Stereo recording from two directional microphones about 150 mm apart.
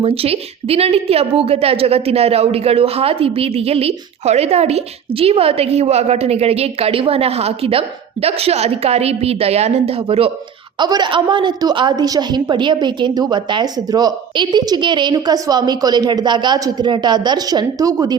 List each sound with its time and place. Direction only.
0.0 s a woman's voice: 40° right (ahead or behind)
10.8 s a woman's voice: 30° right (ahead or behind)